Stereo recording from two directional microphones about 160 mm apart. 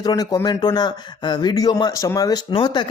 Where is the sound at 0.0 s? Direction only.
25° left (ahead or behind).